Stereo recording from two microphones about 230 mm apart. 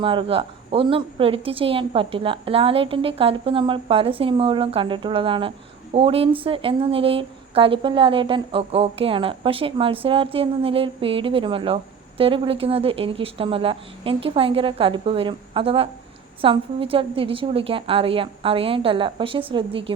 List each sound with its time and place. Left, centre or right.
0.0 s a woman's voice: right